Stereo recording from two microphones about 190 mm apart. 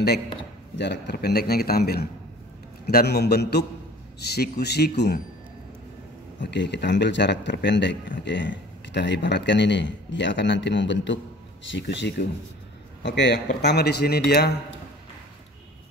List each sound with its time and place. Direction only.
0.7 s a man's voice: 65° left (ahead or behind)
6.4 s a man's voice: 65° left (ahead or behind)